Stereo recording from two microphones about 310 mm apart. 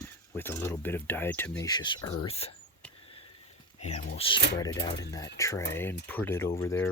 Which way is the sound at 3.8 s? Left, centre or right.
Left.